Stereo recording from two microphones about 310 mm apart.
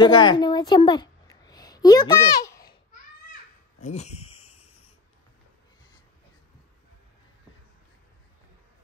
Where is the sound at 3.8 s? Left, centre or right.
Left.